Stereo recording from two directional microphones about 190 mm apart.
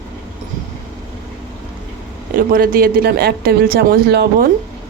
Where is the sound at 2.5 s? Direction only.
50° right (ahead or behind).